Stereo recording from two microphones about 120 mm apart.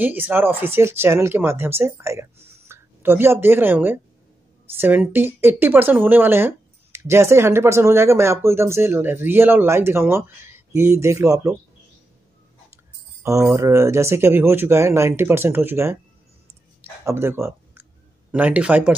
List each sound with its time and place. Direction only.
0.0 s speech: 15° right (ahead or behind)
13.2 s speech: 25° right (ahead or behind)
16.8 s a sound: 20° right (ahead or behind)
18.3 s speech: 10° right (ahead or behind)